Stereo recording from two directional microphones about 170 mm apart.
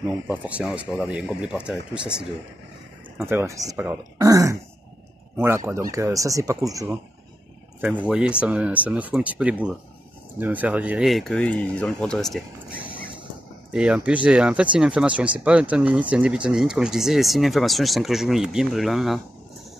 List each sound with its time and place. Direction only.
0.0 s speech: 10° right (ahead or behind)
3.2 s speech: 15° right (ahead or behind)
7.8 s speech: 5° right (ahead or behind)
13.7 s speech: 5° right (ahead or behind)